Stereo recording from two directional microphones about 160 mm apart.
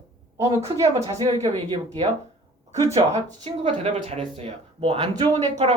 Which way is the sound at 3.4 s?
40° right (ahead or behind).